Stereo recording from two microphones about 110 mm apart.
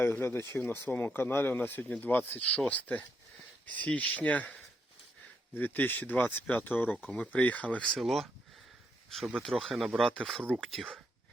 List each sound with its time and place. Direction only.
0.0 s speech: 20° left (ahead or behind)
7.9 s speech: centre (ahead or behind)